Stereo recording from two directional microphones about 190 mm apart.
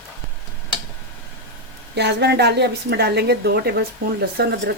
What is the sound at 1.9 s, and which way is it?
A woman's voice, 60° right (ahead or behind).